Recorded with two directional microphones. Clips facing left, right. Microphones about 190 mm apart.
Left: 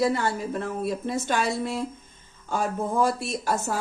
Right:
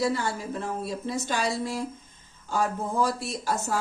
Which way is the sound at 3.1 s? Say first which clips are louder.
Left 3 dB; 55° left (ahead or behind).